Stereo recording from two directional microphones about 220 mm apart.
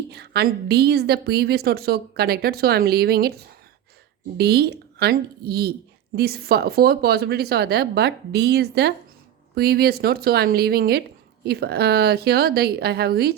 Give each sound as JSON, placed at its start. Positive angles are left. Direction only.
{"t": 0.1, "sound": "a woman's voice", "side_deg": -50}